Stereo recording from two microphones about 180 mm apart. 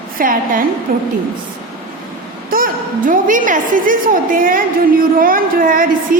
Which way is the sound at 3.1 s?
45° right (ahead or behind).